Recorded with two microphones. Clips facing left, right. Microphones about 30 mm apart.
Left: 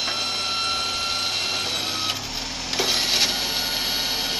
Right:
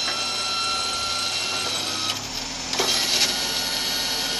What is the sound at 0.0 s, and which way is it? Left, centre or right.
Ratchet, centre.